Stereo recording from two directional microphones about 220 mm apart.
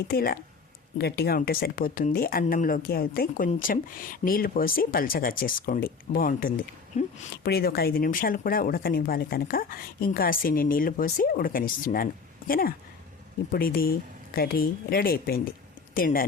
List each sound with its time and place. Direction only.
0.1 s speech: 45° left (ahead or behind)